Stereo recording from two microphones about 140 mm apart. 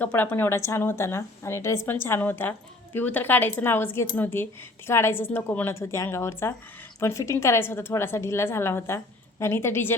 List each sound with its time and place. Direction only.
0.0 s a woman's voice: 15° left (ahead or behind)